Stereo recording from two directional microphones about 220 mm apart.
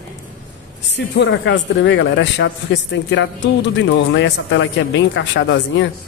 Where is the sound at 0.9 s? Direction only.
55° left (ahead or behind).